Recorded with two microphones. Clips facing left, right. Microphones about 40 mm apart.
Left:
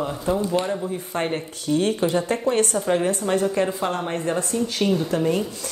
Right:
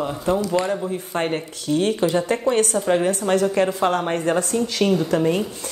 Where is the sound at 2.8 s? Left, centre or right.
Centre.